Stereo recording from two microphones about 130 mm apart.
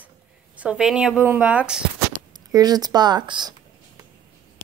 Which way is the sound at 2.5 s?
30° right (ahead or behind).